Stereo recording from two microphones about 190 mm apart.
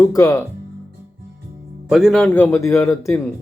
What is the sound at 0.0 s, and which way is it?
Speech, 15° left (ahead or behind).